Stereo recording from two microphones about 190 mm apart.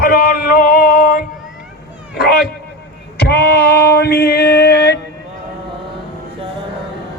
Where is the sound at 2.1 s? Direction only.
55° left (ahead or behind).